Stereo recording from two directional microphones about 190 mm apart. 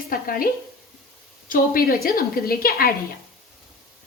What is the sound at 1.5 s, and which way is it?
A woman's voice, 50° left (ahead or behind).